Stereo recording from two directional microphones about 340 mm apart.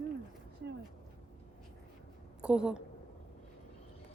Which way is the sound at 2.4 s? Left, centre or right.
Centre.